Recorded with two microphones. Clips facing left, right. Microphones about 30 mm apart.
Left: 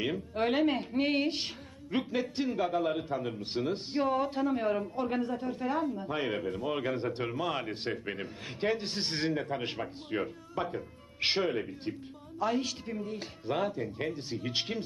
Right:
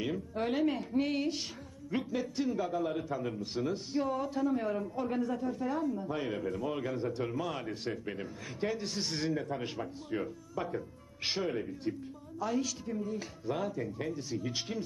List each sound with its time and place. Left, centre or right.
0.0 s a man's voice: left